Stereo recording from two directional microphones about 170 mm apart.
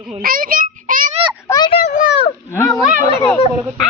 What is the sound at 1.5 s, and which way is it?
Speech, 20° left (ahead or behind).